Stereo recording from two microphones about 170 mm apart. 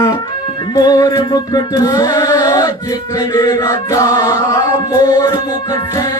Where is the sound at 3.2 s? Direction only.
25° left (ahead or behind).